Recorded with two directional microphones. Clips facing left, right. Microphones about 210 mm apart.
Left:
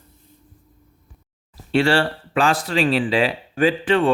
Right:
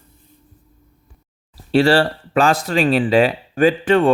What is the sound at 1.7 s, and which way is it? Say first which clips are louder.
Speech: right 4 dB; 35° right (ahead or behind).